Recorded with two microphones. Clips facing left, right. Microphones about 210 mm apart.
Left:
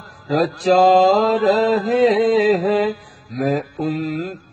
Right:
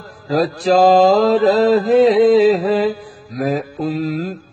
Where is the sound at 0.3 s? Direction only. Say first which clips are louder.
Right 1 dB; centre (ahead or behind).